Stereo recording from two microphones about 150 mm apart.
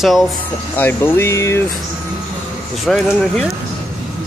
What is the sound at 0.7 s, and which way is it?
Speech, 15° left (ahead or behind).